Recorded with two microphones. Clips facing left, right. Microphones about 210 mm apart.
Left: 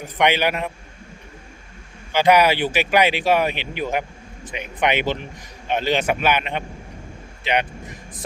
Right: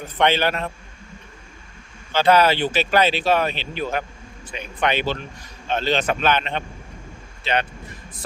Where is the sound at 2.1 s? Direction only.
15° left (ahead or behind).